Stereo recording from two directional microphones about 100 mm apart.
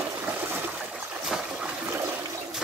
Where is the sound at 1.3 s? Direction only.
10° right (ahead or behind).